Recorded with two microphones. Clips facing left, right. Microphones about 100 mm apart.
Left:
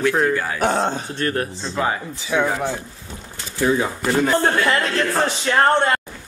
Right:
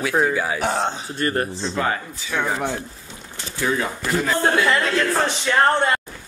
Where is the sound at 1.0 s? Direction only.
10° right (ahead or behind).